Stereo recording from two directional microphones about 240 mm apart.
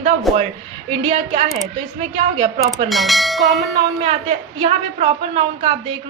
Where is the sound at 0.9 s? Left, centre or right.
Right.